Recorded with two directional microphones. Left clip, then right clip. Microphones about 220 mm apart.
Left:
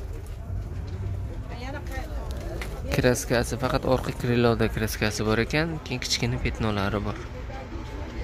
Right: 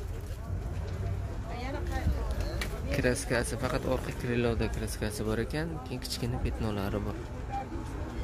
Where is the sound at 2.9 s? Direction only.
20° left (ahead or behind).